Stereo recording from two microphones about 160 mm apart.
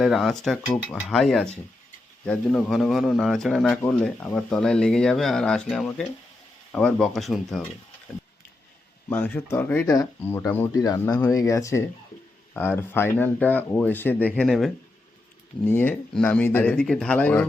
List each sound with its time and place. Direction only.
0.0 s speech: centre (ahead or behind)
9.0 s speech: 10° left (ahead or behind)
15.6 s speech: 10° left (ahead or behind)